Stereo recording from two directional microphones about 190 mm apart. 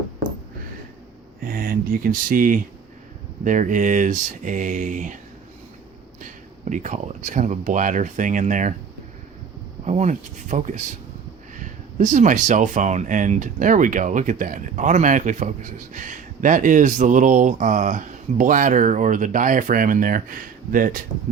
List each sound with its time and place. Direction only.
1.4 s speech: 50° right (ahead or behind)
6.2 s speech: 40° right (ahead or behind)
9.8 s speech: 40° right (ahead or behind)